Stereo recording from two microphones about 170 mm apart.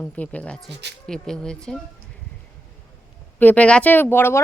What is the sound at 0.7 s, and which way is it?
Speech, 85° right.